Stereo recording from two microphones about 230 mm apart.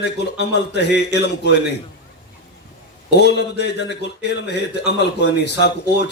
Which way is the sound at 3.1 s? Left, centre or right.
Left.